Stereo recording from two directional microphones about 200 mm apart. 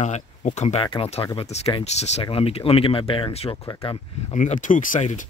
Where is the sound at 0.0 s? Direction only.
35° left (ahead or behind).